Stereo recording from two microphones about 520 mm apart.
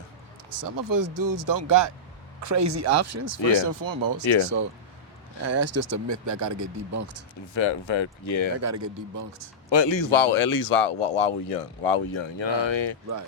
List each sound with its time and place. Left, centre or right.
0.6 s speech: right
5.4 s speech: right
7.5 s speech: left
8.5 s speech: right
9.6 s speech: left